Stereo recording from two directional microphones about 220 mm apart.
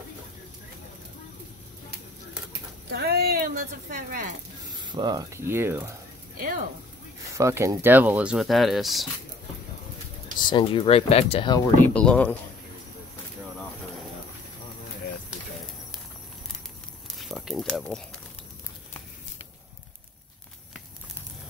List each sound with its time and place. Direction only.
2.9 s speech: 45° right (ahead or behind)
4.7 s speech: 20° right (ahead or behind)
7.3 s speech: 15° right (ahead or behind)
10.4 s speech: 20° left (ahead or behind)
11.9 s speech: 5° left (ahead or behind)
17.1 s a sound: centre (ahead or behind)